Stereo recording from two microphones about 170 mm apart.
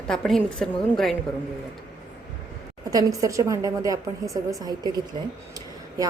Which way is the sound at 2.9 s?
20° right (ahead or behind).